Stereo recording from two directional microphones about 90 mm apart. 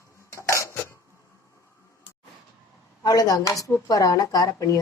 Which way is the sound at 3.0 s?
45° left (ahead or behind).